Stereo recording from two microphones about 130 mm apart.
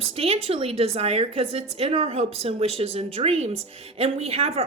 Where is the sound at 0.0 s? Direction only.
50° right (ahead or behind).